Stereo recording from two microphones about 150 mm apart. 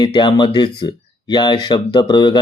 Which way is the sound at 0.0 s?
30° left (ahead or behind).